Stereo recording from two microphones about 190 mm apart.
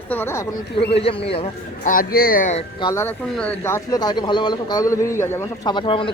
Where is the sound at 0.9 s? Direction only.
30° left (ahead or behind).